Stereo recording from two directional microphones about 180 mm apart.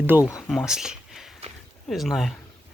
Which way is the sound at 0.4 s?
Centre (ahead or behind).